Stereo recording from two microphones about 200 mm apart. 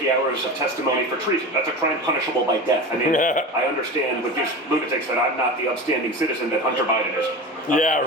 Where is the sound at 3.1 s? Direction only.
40° left (ahead or behind).